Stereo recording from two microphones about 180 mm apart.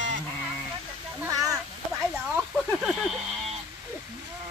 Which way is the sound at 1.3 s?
20° right (ahead or behind).